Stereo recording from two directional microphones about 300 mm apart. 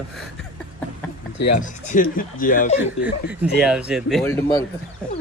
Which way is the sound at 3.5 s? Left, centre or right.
Centre.